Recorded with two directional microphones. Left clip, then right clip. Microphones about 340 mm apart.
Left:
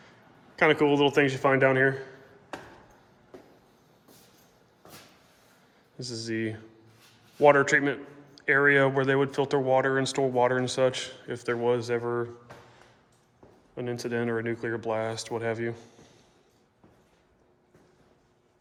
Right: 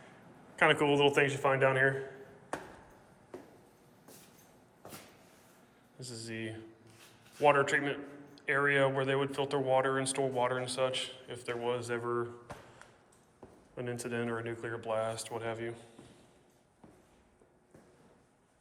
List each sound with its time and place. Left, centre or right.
0.5 s a man's voice: centre
6.0 s speech: centre
13.7 s speech: centre